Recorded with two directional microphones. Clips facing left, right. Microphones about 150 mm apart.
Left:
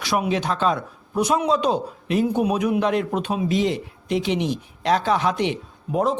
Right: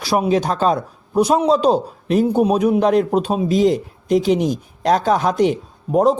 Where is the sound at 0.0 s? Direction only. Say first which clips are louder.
Right 5 dB; 35° right (ahead or behind).